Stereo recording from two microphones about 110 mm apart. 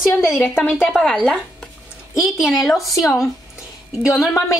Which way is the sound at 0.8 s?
5° left (ahead or behind).